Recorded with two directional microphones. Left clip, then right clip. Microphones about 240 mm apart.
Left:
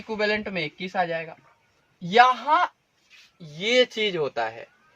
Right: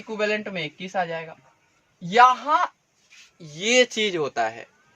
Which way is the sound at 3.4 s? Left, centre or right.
Right.